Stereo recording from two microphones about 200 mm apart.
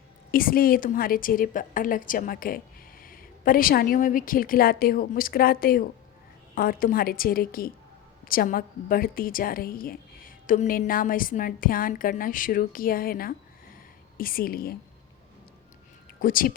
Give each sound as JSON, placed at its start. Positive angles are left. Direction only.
{"t": 0.3, "sound": "a woman's voice", "side_deg": 45}
{"t": 16.2, "sound": "a woman's voice", "side_deg": 45}